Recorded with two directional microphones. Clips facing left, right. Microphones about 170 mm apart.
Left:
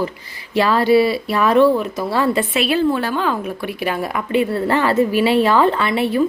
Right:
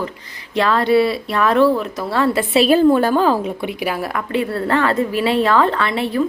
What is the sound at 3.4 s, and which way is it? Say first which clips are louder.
Speech: right 1 dB; 20° right (ahead or behind).